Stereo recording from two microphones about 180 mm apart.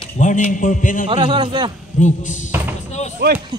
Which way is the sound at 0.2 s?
45° left (ahead or behind).